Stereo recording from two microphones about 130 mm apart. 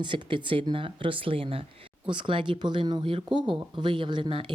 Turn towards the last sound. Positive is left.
turn(degrees=-40)  # may be behind; listen again after turning